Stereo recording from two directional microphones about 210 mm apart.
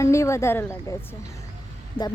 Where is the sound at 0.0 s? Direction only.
15° left (ahead or behind).